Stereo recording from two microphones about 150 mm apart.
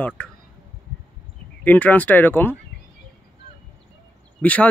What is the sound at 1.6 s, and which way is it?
Speech, 10° left (ahead or behind).